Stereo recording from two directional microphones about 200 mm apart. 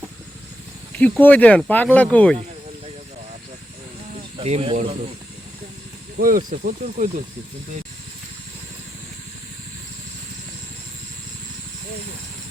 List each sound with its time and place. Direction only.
0.9 s speech: 5° left (ahead or behind)
4.4 s speech: 30° right (ahead or behind)
6.1 s speech: 45° right (ahead or behind)